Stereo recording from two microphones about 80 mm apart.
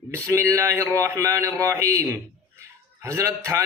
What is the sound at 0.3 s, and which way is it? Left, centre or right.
Speech, right.